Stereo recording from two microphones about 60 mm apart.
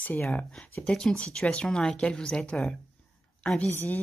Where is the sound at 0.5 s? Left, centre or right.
Centre.